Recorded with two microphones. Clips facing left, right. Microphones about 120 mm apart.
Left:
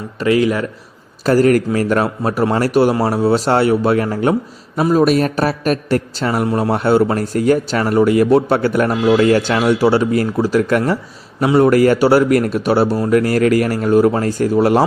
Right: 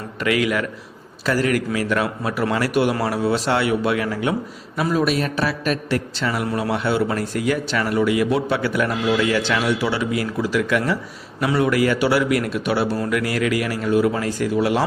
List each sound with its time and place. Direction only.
0.2 s a man's voice: 30° left (ahead or behind)
1.2 s a man's voice: 40° left (ahead or behind)